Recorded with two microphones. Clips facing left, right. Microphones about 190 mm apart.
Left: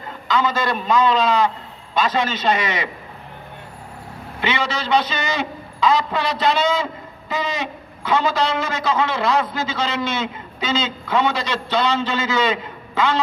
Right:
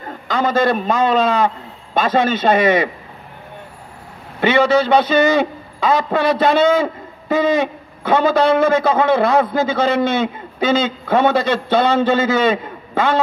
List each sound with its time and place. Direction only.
0.3 s a man's voice: 55° right (ahead or behind)
4.4 s a man's voice: 55° right (ahead or behind)